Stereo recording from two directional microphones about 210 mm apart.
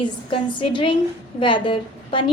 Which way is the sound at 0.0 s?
25° left (ahead or behind).